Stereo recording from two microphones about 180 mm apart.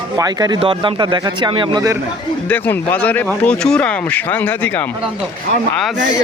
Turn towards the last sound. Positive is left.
turn(degrees=10)  # may be behind; listen again after turning